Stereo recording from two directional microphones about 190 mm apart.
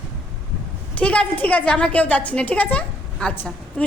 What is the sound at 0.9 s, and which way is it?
A woman's voice, 5° left (ahead or behind).